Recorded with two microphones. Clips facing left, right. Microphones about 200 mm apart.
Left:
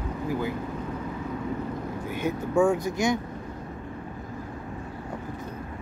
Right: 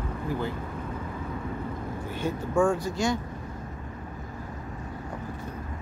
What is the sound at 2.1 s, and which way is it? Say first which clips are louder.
Speech: left 2 dB; 10° left (ahead or behind).